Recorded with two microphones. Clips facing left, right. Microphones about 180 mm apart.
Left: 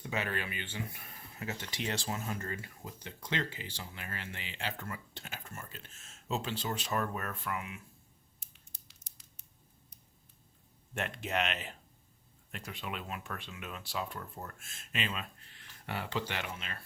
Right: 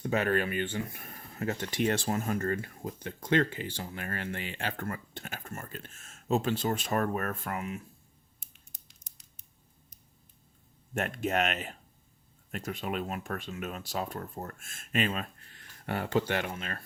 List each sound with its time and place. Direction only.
0.0 s speech: 50° right (ahead or behind)
10.9 s speech: 45° right (ahead or behind)